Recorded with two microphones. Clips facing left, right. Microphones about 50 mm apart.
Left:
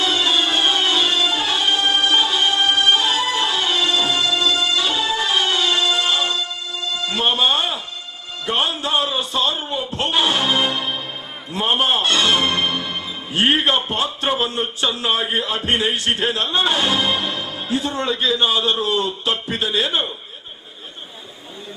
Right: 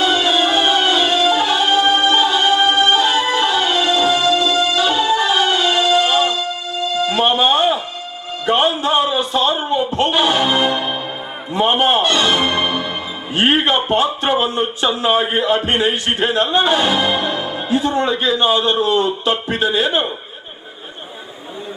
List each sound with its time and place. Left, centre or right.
0.0 s music: right
1.2 s music: centre
2.6 s music: right
2.9 s music: right
4.0 s music: right
4.3 s music: centre
8.4 s a sound: right
10.1 s music: right
10.3 s music: right
11.5 s a man's voice: centre
12.0 s music: right
13.3 s a man's voice: right
16.9 s music: right
17.8 s a man's voice: centre